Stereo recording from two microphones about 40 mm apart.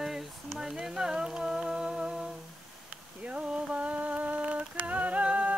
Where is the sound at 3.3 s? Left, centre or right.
Right.